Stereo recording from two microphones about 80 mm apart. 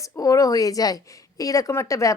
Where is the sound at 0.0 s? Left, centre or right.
Left.